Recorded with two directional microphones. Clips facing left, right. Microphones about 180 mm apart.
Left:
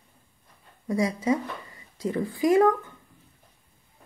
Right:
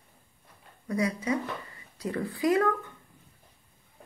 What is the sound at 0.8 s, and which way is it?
A woman's voice, 25° left (ahead or behind).